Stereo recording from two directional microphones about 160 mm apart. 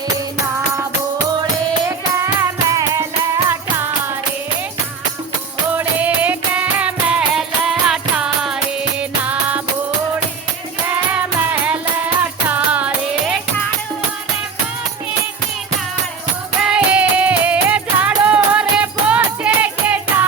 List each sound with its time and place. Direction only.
1.9 s music: 20° right (ahead or behind)
5.7 s music: 10° right (ahead or behind)
11.1 s music: 10° right (ahead or behind)
16.6 s music: 5° right (ahead or behind)